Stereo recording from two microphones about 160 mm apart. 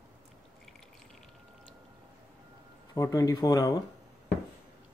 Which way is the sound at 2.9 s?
20° left (ahead or behind).